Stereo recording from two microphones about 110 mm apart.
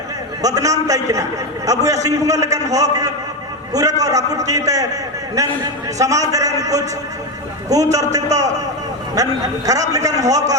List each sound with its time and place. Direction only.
0.4 s a man's voice: 30° right (ahead or behind)